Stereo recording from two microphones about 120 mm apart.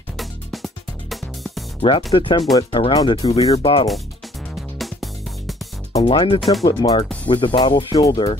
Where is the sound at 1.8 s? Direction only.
45° left (ahead or behind).